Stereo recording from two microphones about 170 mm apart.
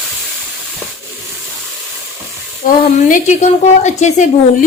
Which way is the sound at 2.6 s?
50° left (ahead or behind).